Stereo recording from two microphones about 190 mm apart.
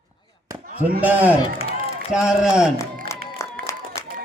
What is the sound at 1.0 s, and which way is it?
A woman's voice, 10° right (ahead or behind).